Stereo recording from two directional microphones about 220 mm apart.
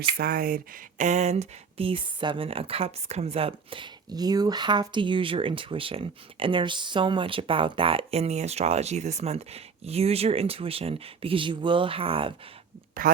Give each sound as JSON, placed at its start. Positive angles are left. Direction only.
{"t": 0.2, "sound": "speech", "side_deg": -40}